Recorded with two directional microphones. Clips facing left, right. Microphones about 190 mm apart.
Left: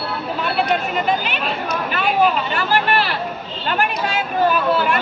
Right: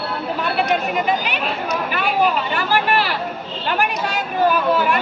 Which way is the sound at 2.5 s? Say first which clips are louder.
Even; 15° right (ahead or behind).